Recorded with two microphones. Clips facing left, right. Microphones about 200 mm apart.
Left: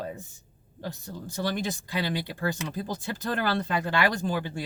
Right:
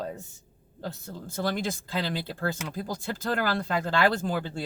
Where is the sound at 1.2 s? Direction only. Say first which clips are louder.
Even; 20° left (ahead or behind).